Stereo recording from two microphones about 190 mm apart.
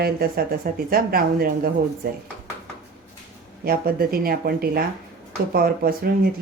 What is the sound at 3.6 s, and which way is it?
Speech, 50° right (ahead or behind).